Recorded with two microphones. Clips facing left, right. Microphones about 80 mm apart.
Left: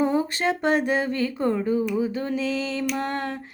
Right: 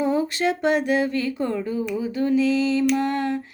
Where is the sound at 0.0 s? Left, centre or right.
Left.